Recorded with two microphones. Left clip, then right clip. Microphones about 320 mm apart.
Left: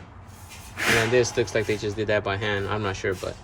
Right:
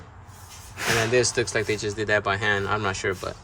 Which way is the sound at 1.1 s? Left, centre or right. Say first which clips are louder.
Even; centre.